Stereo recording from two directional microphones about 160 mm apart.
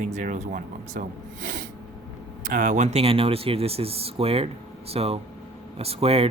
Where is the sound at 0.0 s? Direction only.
55° right (ahead or behind).